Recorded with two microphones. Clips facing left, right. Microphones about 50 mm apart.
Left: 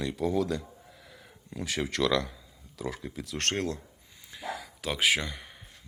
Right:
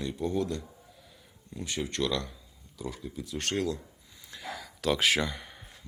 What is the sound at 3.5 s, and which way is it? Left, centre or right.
Speech, left.